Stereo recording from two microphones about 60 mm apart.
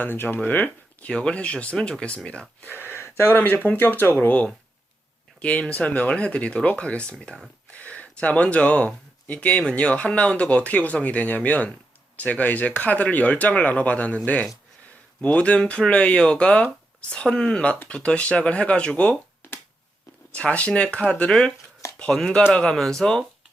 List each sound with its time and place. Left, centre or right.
0.0 s speech: left
1.0 s speech: centre
2.6 s speech: left
3.3 s speech: left
5.4 s speech: centre
15.2 s speech: centre
19.4 s finger snapping: left
20.3 s speech: left
21.9 s chopping: centre
22.5 s speech: centre